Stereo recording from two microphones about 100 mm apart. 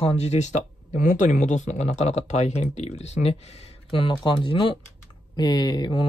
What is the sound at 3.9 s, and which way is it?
Speech, 55° left (ahead or behind).